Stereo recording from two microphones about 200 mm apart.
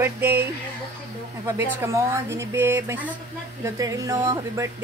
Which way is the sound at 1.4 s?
15° right (ahead or behind).